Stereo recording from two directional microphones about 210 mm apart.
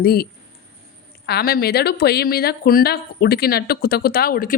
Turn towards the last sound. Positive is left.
turn(degrees=45)  # may be behind; listen again after turning